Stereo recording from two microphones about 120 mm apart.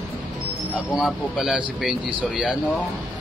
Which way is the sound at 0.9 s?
Centre (ahead or behind).